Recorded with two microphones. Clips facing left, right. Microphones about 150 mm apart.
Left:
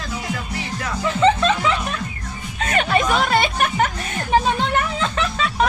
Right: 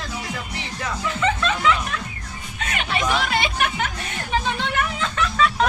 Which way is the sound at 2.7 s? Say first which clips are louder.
Left 5 dB; 45° left (ahead or behind).